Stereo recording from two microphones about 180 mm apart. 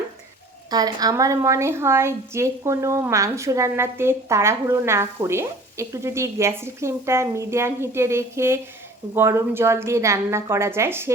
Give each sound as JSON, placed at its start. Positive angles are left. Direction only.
{"t": 0.7, "sound": "a woman's voice", "side_deg": -20}